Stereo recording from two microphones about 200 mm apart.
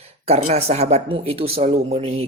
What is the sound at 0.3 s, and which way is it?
Speech, 30° right (ahead or behind).